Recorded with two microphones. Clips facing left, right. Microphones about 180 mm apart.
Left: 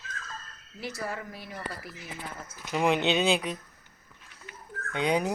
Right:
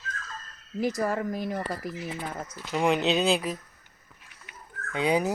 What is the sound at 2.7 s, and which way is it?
Speech, centre (ahead or behind).